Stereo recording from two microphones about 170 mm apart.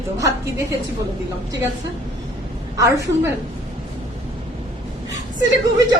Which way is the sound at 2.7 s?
20° right (ahead or behind).